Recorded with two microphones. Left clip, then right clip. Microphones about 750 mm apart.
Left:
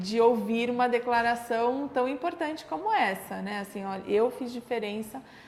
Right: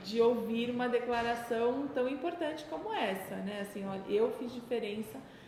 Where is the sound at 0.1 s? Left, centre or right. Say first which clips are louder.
Left 6 dB; left.